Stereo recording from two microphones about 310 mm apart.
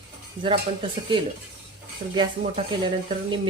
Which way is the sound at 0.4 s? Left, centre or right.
Centre.